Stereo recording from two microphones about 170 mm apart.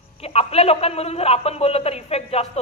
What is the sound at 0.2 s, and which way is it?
A woman's voice, 35° left (ahead or behind).